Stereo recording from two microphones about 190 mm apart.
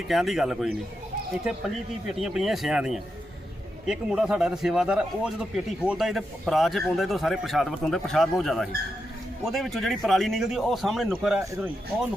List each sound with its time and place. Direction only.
0.1 s speech: centre (ahead or behind)
2.0 s speech: 5° right (ahead or behind)